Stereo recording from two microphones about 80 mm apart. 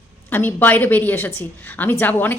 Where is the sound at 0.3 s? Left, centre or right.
Left.